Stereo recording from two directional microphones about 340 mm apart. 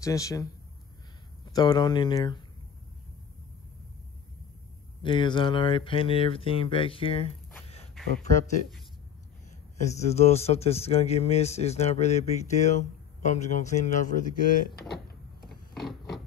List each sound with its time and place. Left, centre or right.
0.0 s speech: centre
5.0 s speech: centre
9.8 s speech: centre
15.7 s a sound: centre